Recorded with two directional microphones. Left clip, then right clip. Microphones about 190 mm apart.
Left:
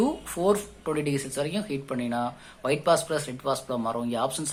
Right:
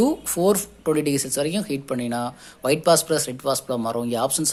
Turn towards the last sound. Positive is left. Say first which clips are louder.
# right 5 dB
turn(degrees=-45)  # may be behind; listen again after turning